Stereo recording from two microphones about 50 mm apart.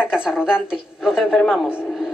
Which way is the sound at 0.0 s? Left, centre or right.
Centre.